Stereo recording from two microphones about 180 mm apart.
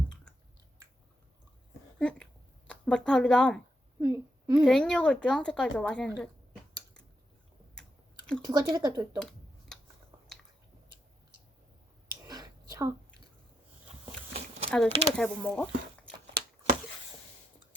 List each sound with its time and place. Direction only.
2.0 s speech: 5° left (ahead or behind)
4.0 s a woman's voice: 10° right (ahead or behind)
4.7 s speech: 5° left (ahead or behind)
8.4 s speech: 20° right (ahead or behind)
9.1 s a sound: 5° left (ahead or behind)
12.3 s a sound: 20° right (ahead or behind)
14.7 s speech: 5° left (ahead or behind)